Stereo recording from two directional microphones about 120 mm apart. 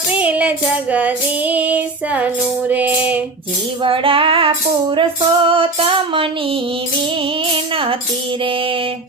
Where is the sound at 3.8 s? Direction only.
45° right (ahead or behind).